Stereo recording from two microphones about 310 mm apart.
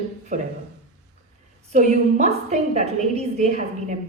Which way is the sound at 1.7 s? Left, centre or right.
Right.